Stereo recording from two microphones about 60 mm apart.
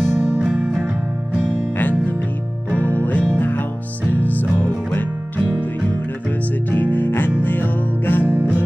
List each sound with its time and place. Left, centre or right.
0.4 s music: centre
1.8 s music: left
8.3 s music: right